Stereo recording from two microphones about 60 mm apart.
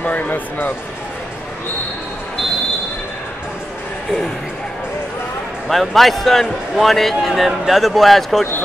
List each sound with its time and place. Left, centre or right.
0.0 s speech: left
5.7 s speech: centre